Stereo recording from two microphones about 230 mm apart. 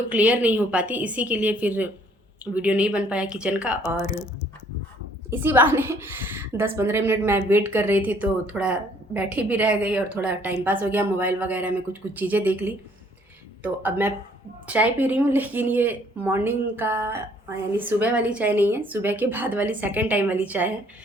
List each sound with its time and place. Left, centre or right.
0.1 s a woman's voice: centre
5.3 s a woman's voice: centre